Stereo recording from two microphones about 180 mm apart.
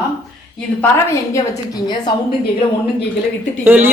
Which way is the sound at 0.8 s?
15° left (ahead or behind).